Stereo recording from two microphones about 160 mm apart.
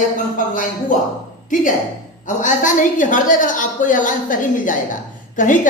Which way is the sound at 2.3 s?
50° left (ahead or behind).